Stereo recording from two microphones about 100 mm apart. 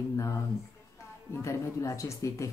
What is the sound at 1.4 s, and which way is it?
Speech, 30° left (ahead or behind).